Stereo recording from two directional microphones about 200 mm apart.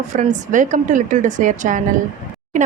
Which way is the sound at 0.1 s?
40° right (ahead or behind).